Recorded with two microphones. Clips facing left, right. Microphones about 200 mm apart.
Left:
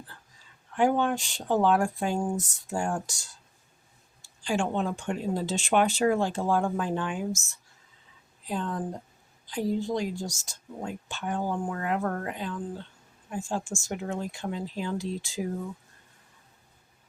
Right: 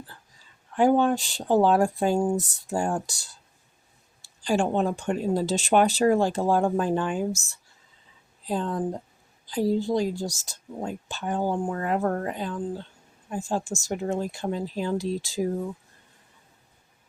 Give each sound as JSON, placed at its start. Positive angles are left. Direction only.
{"t": 0.8, "sound": "speech", "side_deg": -35}
{"t": 4.4, "sound": "speech", "side_deg": -40}